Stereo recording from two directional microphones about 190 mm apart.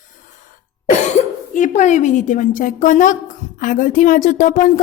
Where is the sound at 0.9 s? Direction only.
40° left (ahead or behind).